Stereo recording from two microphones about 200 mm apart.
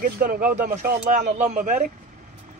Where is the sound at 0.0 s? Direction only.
45° right (ahead or behind).